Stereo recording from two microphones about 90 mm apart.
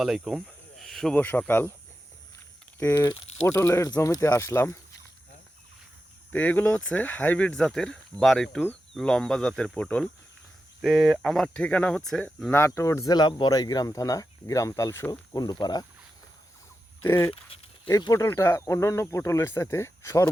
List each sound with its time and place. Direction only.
0.0 s cricket: 5° right (ahead or behind)
1.1 s speech: 15° left (ahead or behind)
2.7 s speech: 35° left (ahead or behind)
6.3 s speech: 20° left (ahead or behind)
7.5 s speech: 5° left (ahead or behind)
10.8 s speech: centre (ahead or behind)
12.5 s speech: 30° left (ahead or behind)
13.1 s speech: 50° left (ahead or behind); by 15.0 s 35° left (ahead or behind)
15.4 s speech: 50° left (ahead or behind)
17.0 s speech: 25° left (ahead or behind)